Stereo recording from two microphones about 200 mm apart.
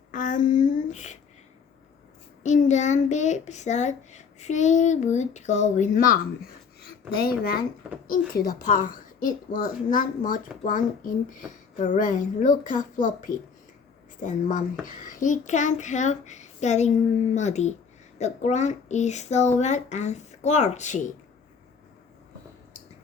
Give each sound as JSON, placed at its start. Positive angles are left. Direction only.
{"t": 0.1, "sound": "speech", "side_deg": 40}
{"t": 2.4, "sound": "a child's voice", "side_deg": 35}